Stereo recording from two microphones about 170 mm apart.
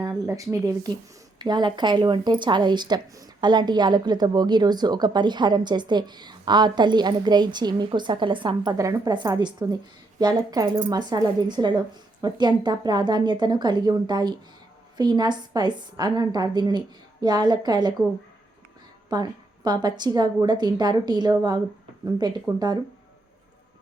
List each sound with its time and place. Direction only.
0.0 s speech: 15° right (ahead or behind)
19.1 s speech: 25° right (ahead or behind)